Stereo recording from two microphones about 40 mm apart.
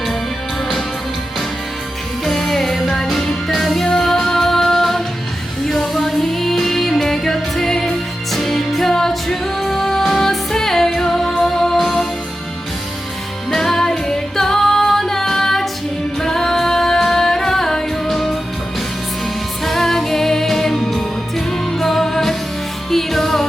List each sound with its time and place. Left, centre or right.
2.2 s music: centre
13.5 s music: centre
19.6 s music: centre